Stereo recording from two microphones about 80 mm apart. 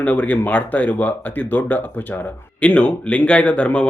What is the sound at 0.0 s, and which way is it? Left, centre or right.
Speech, centre.